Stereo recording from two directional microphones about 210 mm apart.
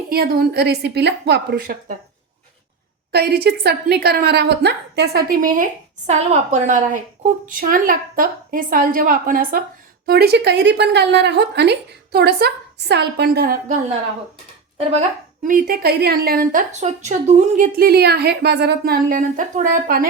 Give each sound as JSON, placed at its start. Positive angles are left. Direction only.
{"t": 0.1, "sound": "a woman's voice", "side_deg": -45}
{"t": 3.1, "sound": "a woman's voice", "side_deg": -50}
{"t": 14.8, "sound": "speech", "side_deg": -30}
{"t": 15.4, "sound": "a woman's voice", "side_deg": -40}